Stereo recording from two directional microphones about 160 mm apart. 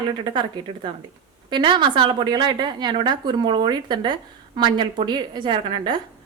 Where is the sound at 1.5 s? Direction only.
30° right (ahead or behind).